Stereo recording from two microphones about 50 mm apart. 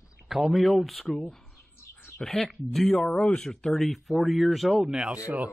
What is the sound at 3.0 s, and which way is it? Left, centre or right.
Speech, centre.